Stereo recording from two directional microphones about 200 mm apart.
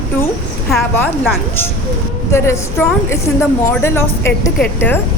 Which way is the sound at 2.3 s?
15° left (ahead or behind).